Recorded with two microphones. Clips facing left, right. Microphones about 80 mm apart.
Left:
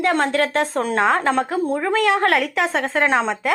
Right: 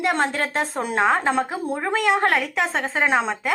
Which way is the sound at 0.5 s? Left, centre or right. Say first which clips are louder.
Left 3 dB; centre.